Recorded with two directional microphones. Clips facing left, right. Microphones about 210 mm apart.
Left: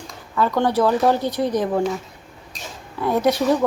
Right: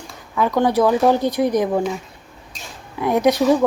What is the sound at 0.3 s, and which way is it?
Speech, 15° right (ahead or behind).